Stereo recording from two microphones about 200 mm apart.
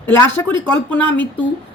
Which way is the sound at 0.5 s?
25° right (ahead or behind).